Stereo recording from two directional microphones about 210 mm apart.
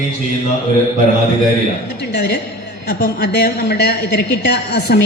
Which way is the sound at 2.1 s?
55° left (ahead or behind).